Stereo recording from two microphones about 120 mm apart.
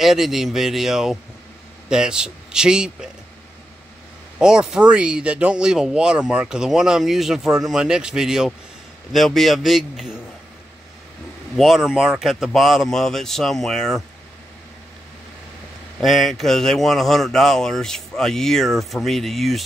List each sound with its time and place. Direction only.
0.0 s speech: 5° right (ahead or behind)
4.4 s speech: 5° right (ahead or behind)
11.5 s speech: centre (ahead or behind)
16.0 s speech: centre (ahead or behind)